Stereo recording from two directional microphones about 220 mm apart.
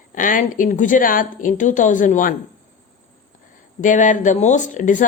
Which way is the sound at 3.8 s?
35° left (ahead or behind).